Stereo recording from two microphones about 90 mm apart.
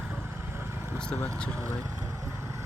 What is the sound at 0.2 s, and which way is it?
Vehicle, 25° right (ahead or behind).